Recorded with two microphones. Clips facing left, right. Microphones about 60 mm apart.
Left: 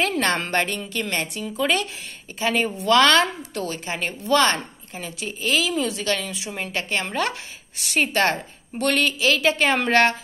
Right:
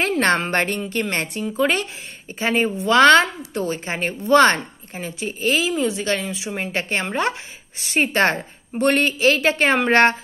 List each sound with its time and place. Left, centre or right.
0.5 s a woman's voice: right